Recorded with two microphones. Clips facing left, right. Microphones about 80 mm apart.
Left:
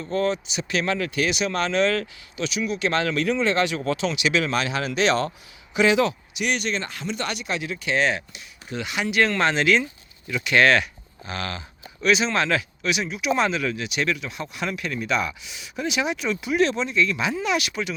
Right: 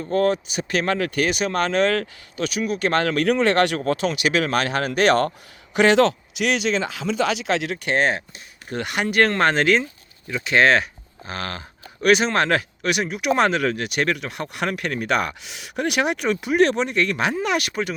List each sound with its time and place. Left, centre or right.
0.1 s speech: right
7.9 s speech: right
10.2 s speech: right
12.0 s speech: right